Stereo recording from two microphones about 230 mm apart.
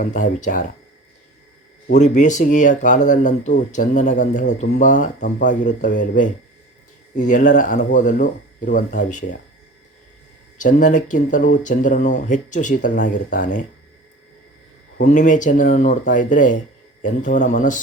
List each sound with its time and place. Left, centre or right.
0.0 s speech: left
2.0 s speech: left
7.2 s speech: left
10.6 s speech: left
15.0 s speech: left